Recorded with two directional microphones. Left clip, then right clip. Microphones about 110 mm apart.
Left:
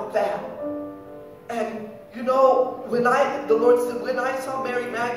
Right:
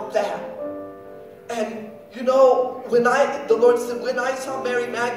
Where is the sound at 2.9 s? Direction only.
45° left (ahead or behind).